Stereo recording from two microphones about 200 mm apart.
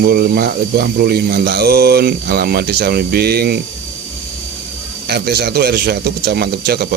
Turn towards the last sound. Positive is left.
turn(degrees=-55)  # may be behind; listen again after turning